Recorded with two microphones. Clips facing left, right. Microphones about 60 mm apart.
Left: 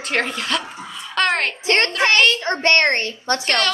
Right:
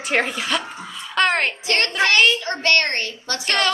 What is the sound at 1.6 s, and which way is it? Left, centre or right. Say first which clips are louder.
A child's voice: left 2 dB; left.